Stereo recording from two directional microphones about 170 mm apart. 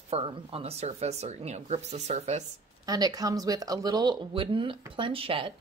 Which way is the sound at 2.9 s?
20° right (ahead or behind).